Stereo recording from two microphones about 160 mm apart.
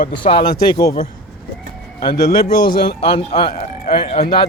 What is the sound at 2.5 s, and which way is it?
A man's voice, 25° left (ahead or behind).